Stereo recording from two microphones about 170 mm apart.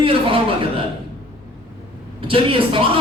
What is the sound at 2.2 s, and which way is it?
Speech, 30° right (ahead or behind).